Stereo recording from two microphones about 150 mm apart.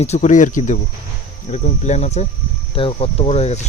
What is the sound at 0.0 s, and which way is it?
Speech, 50° left (ahead or behind).